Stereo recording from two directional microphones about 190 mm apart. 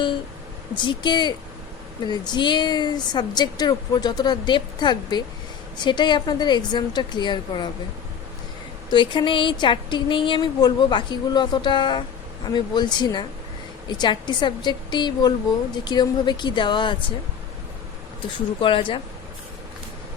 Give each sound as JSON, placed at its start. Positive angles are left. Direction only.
{"t": 0.8, "sound": "speech", "side_deg": 25}
{"t": 8.9, "sound": "speech", "side_deg": 25}
{"t": 18.6, "sound": "speech", "side_deg": 25}